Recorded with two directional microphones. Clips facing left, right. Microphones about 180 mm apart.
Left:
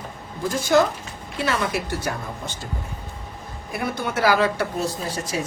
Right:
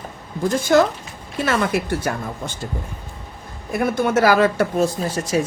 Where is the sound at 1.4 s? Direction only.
50° right (ahead or behind).